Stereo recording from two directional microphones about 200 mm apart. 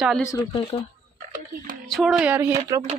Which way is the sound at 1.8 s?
Centre (ahead or behind).